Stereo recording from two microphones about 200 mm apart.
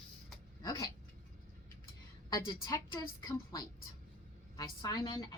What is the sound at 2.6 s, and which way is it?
A woman's voice, 20° left (ahead or behind).